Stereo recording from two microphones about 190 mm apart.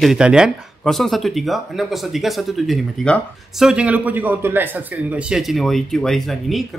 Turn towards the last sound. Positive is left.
turn(degrees=0)  # may be behind; listen again after turning